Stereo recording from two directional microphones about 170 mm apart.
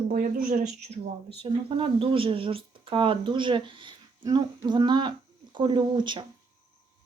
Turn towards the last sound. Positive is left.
turn(degrees=-30)  # may be behind; listen again after turning